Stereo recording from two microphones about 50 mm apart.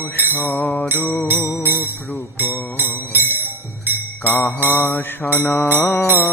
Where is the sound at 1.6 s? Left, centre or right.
Right.